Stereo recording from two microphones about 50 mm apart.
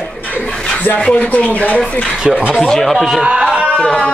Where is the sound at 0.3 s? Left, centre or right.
Left.